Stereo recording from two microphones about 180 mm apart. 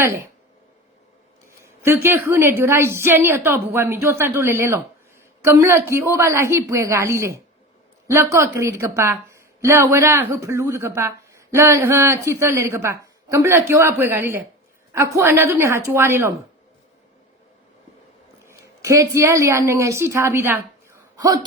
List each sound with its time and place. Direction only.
1.5 s a woman's voice: 15° right (ahead or behind)
18.8 s a woman's voice: 15° right (ahead or behind)